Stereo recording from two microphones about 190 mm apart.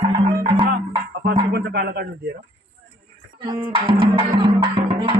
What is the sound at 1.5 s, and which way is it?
Speech, 60° right (ahead or behind).